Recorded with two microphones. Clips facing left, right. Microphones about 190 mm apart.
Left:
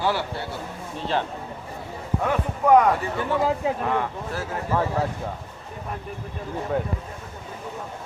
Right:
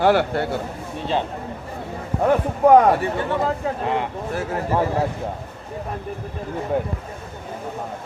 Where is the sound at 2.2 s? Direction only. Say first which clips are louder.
Right 7 dB; 35° right (ahead or behind).